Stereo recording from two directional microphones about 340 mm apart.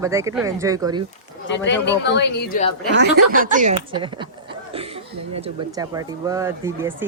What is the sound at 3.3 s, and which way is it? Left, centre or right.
Speech, right.